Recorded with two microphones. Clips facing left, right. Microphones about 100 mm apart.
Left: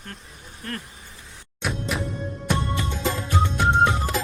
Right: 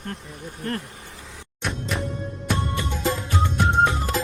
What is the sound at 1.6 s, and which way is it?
Music, 5° left (ahead or behind).